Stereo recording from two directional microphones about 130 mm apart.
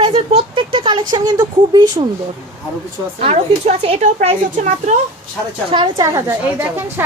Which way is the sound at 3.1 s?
50° right (ahead or behind).